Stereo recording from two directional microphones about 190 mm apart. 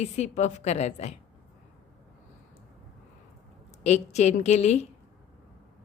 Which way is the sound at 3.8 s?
35° left (ahead or behind).